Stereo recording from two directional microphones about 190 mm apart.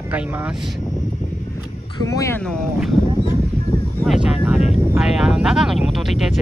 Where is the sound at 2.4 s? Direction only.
5° left (ahead or behind).